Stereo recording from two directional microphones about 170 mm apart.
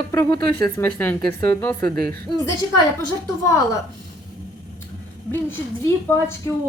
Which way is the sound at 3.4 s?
15° left (ahead or behind).